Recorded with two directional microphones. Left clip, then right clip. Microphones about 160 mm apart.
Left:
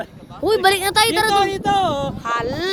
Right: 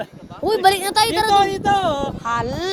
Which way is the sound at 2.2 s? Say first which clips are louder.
Left 1 dB; 25° left (ahead or behind).